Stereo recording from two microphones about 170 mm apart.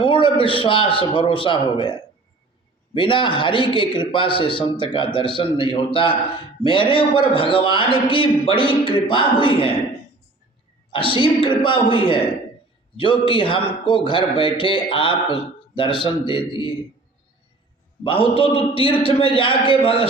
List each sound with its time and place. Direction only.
0.0 s a man's voice: 30° left (ahead or behind)
10.9 s a man's voice: 30° left (ahead or behind)
18.0 s a man's voice: 30° left (ahead or behind)